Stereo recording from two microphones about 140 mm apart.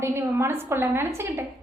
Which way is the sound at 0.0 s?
20° right (ahead or behind).